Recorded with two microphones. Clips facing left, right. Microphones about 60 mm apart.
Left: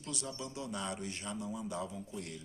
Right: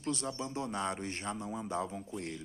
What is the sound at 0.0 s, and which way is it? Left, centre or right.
Speech, right.